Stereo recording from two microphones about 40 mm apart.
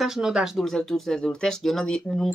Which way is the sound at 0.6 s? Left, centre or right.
Centre.